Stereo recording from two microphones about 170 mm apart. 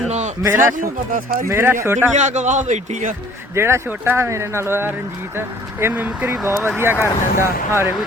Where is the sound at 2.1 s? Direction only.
45° right (ahead or behind).